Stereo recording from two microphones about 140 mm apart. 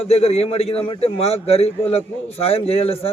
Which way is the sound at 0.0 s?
45° left (ahead or behind).